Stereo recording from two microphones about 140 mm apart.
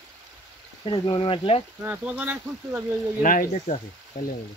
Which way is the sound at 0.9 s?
35° left (ahead or behind).